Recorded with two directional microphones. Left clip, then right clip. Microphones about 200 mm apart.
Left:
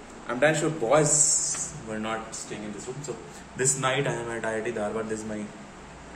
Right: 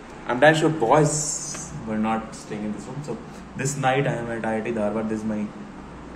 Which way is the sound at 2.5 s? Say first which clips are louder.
Right 7 dB; 25° left (ahead or behind).